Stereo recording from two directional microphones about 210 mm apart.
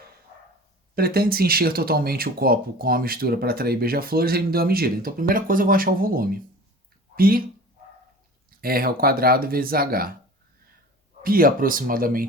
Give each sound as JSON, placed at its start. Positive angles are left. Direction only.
{"t": 0.9, "sound": "speech", "side_deg": -45}
{"t": 8.4, "sound": "speech", "side_deg": -45}
{"t": 11.2, "sound": "speech", "side_deg": -45}